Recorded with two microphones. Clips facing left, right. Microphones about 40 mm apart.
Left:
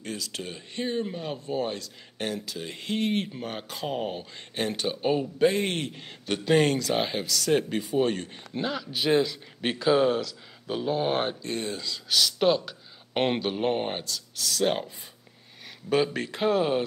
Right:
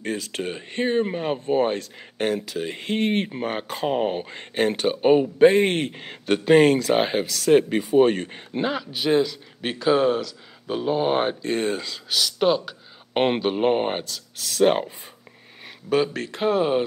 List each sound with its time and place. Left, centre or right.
0.0 s speech: right
8.9 s speech: centre
11.4 s speech: right
12.1 s speech: centre; by 15.0 s right
16.1 s speech: centre